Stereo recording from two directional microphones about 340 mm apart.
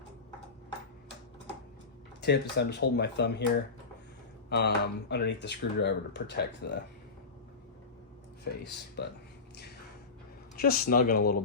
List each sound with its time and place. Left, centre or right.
2.2 s speech: left
4.4 s speech: left
8.5 s speech: left
10.6 s speech: left